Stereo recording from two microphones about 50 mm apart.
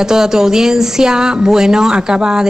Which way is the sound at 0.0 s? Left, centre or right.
Centre.